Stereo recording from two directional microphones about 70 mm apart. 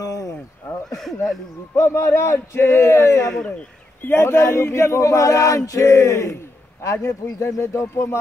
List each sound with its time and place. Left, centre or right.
0.0 s a sound: left
0.8 s speech: centre
1.8 s a man's voice: left